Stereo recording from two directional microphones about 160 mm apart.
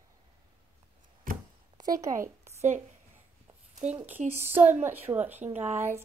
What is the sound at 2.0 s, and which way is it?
Speech, 20° right (ahead or behind).